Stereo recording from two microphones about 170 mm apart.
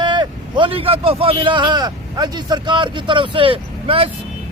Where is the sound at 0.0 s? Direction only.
25° right (ahead or behind).